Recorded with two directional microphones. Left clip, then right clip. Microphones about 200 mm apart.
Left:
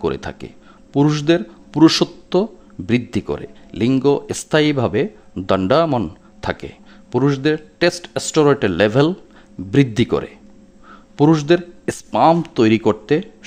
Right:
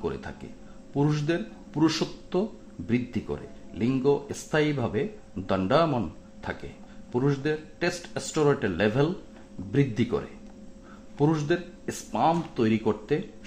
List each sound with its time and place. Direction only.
0.0 s speech: 50° left (ahead or behind)